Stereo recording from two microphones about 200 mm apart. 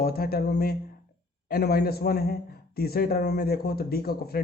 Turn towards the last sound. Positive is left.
turn(degrees=50)  # may be behind; listen again after turning